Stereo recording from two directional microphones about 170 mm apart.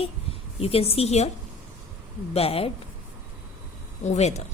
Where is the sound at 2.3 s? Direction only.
35° left (ahead or behind).